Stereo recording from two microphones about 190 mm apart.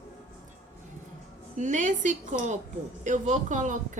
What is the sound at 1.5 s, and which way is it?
A woman's voice, 40° right (ahead or behind).